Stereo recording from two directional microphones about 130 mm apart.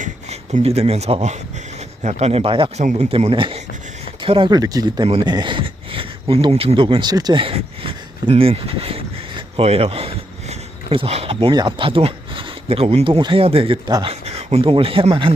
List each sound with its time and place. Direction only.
0.0 s speech: 65° right (ahead or behind); by 2.6 s 45° right (ahead or behind)
2.7 s speech: 60° right (ahead or behind); by 6.5 s 40° right (ahead or behind)
6.5 s speech: 50° right (ahead or behind)